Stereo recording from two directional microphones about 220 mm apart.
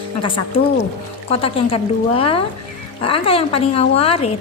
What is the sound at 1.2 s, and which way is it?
A woman's voice, 25° left (ahead or behind).